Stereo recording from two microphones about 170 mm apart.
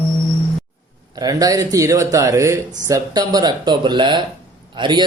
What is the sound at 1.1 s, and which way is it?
Speech, 20° right (ahead or behind).